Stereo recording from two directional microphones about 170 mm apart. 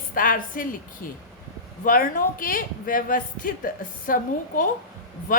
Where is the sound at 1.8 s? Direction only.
55° left (ahead or behind).